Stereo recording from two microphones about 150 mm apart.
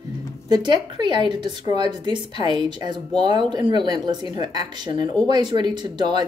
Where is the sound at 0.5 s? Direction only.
30° right (ahead or behind).